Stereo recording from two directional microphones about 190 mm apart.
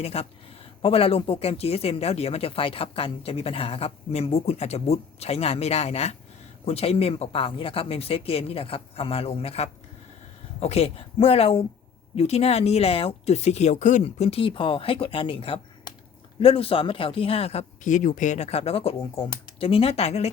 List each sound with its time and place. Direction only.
0.0 s speech: 30° left (ahead or behind)